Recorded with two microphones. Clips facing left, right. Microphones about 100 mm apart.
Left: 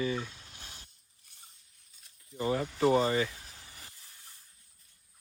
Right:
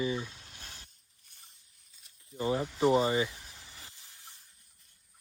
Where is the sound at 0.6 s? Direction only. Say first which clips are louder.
Right 1 dB; 40° right (ahead or behind).